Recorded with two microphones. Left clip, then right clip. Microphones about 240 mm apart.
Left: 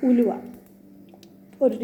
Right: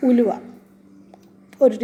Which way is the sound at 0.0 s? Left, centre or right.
Right.